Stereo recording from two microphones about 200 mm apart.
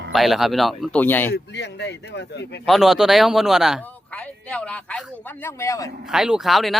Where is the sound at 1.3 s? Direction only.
60° left (ahead or behind).